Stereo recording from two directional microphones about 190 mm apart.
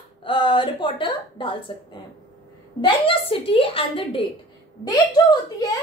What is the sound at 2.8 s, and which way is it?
A woman's voice, 30° left (ahead or behind).